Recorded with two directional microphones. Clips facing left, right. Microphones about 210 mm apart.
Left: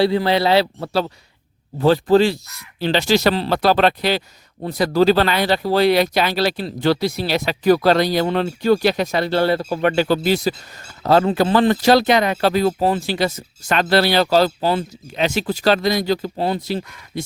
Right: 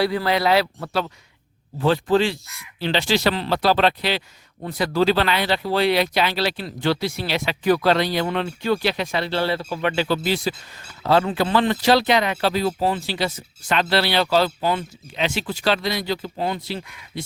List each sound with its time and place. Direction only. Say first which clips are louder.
0.0 s speech: left 4 dB; 25° left (ahead or behind)
3.5 s speech: left 1 dB; 50° left (ahead or behind)